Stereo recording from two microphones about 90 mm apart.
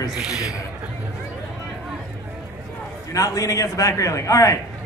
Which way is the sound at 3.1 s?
40° left (ahead or behind).